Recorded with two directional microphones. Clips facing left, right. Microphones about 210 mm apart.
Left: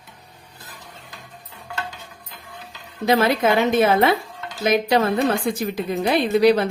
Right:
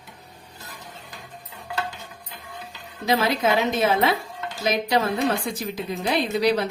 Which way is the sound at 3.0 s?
55° left (ahead or behind).